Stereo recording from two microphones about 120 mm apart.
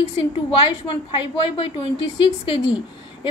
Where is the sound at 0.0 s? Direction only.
45° left (ahead or behind).